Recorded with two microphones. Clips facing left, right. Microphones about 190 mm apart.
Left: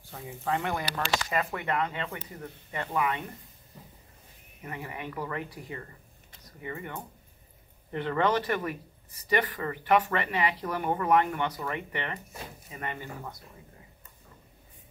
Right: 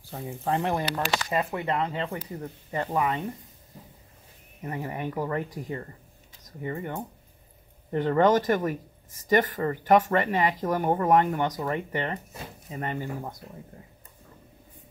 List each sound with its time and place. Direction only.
0.1 s speech: 35° right (ahead or behind)
4.6 s speech: 35° right (ahead or behind)